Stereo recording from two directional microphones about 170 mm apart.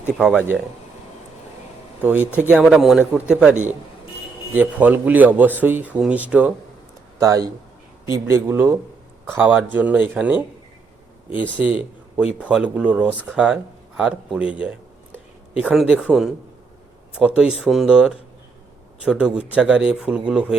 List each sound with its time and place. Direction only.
0.0 s speech: 5° right (ahead or behind)
2.0 s speech: 10° right (ahead or behind)
4.5 s speech: 10° right (ahead or behind)
7.2 s speech: 20° right (ahead or behind)
11.5 s speech: 10° right (ahead or behind)